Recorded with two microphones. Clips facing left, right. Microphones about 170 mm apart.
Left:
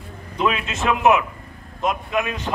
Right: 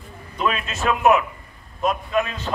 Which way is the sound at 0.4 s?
20° left (ahead or behind).